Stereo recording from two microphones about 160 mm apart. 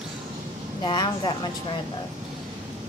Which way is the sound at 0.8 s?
30° left (ahead or behind).